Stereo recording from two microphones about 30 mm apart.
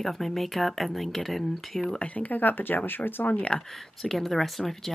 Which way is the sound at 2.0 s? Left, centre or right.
Left.